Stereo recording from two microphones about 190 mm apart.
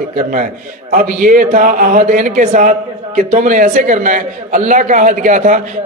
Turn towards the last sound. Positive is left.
turn(degrees=-40)  # may be behind; listen again after turning